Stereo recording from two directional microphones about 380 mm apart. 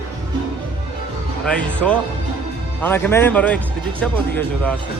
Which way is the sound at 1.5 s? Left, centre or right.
Centre.